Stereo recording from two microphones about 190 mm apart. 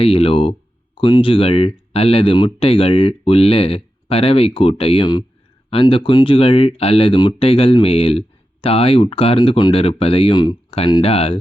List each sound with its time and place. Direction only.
0.0 s speech: 30° left (ahead or behind)